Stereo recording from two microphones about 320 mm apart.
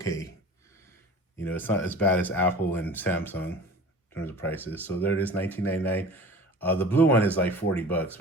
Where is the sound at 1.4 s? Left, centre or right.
Centre.